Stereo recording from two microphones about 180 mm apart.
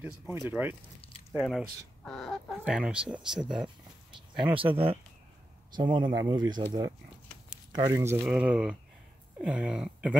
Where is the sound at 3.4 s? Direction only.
25° right (ahead or behind).